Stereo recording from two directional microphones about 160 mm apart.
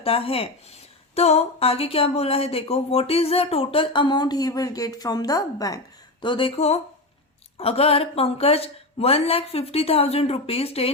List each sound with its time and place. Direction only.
0.0 s a woman's voice: 35° left (ahead or behind)
6.2 s a woman's voice: 30° left (ahead or behind)